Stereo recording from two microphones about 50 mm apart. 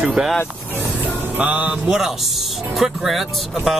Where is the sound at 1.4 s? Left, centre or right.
Right.